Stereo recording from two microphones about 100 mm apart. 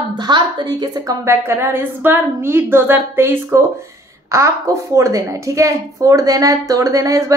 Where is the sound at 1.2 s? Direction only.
25° right (ahead or behind).